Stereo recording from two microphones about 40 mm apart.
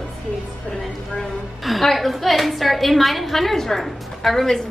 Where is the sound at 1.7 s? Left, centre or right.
Centre.